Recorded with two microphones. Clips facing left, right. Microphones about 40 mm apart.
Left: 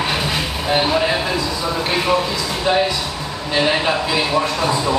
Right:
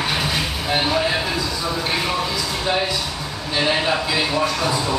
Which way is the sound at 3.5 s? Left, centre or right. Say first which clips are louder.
Left 2 dB; centre.